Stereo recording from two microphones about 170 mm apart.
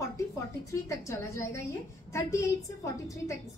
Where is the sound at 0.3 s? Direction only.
15° left (ahead or behind).